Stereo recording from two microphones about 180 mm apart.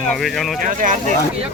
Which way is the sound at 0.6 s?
50° right (ahead or behind).